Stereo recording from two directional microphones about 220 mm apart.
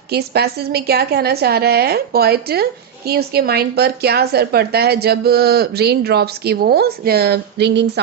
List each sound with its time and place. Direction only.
0.1 s a woman's voice: 45° right (ahead or behind)